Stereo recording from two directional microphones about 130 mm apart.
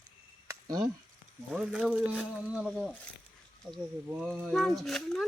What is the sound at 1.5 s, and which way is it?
Speech, 10° right (ahead or behind).